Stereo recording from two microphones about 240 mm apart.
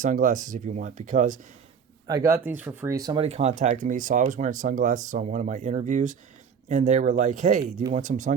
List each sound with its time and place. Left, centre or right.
0.0 s speech: right
2.0 s speech: centre
3.2 s speech: right